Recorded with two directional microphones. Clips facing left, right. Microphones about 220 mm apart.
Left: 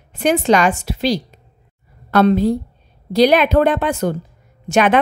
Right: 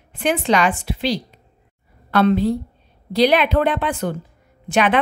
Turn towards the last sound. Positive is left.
turn(degrees=45)  # may be behind; listen again after turning